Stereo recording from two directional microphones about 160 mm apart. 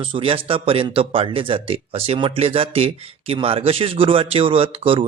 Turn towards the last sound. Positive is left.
turn(degrees=-35)  # may be behind; listen again after turning